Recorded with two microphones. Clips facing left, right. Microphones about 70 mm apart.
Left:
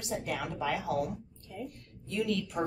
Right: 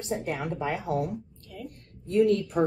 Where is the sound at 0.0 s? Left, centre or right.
Right.